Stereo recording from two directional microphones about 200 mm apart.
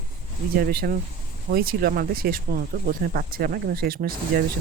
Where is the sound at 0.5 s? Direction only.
50° right (ahead or behind).